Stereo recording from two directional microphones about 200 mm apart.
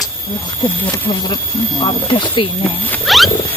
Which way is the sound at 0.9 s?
25° left (ahead or behind).